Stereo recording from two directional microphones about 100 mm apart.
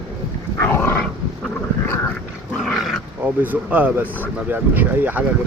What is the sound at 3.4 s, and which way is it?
Speech, 15° right (ahead or behind).